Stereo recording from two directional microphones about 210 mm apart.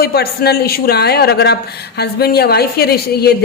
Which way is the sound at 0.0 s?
50° left (ahead or behind).